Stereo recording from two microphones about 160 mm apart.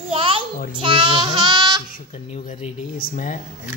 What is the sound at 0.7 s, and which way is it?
Child singing, 30° right (ahead or behind).